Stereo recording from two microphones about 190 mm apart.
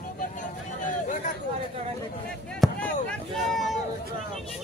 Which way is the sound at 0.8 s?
40° left (ahead or behind).